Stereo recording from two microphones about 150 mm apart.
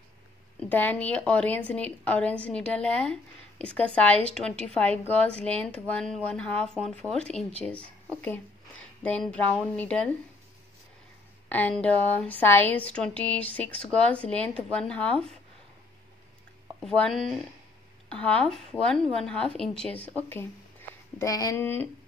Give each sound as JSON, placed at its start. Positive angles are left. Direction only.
{"t": 0.6, "sound": "a woman's voice", "side_deg": 10}
{"t": 11.4, "sound": "a woman's voice", "side_deg": 10}
{"t": 16.8, "sound": "a woman's voice", "side_deg": 0}
{"t": 21.2, "sound": "speech", "side_deg": 25}